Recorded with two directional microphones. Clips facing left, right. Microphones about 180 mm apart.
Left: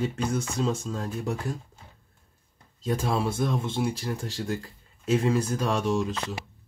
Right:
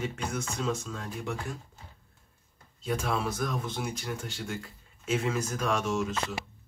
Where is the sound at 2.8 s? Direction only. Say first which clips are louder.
Left 4 dB; 35° left (ahead or behind).